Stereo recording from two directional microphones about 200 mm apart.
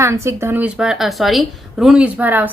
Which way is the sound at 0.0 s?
15° right (ahead or behind).